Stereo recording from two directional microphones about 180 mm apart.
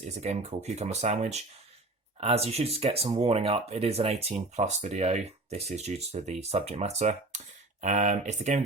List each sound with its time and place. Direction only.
0.0 s speech: 40° right (ahead or behind)